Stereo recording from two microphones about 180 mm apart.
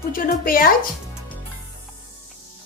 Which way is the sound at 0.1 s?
50° left (ahead or behind).